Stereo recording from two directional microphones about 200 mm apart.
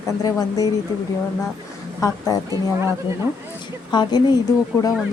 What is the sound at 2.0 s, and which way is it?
Speech, 15° left (ahead or behind).